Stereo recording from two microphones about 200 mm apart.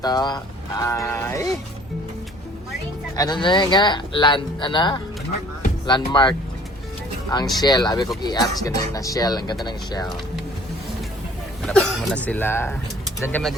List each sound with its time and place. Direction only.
0.0 s speech: 20° left (ahead or behind)
3.2 s speech: 20° left (ahead or behind)
7.6 s speech: 20° left (ahead or behind)
11.6 s speech: 5° left (ahead or behind)